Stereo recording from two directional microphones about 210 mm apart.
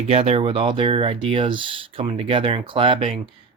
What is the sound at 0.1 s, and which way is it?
Speech, 30° right (ahead or behind).